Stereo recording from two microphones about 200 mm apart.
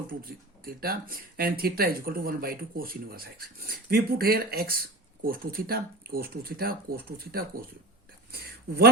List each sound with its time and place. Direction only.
0.1 s speech: 45° right (ahead or behind)